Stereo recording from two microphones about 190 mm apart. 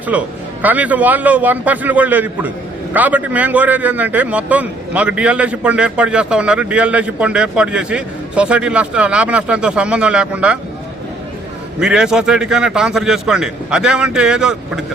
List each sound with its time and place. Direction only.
0.1 s a man's voice: 10° right (ahead or behind)
11.8 s a man's voice: 5° right (ahead or behind)